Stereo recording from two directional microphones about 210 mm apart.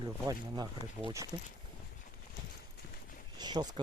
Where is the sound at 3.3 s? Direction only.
20° right (ahead or behind).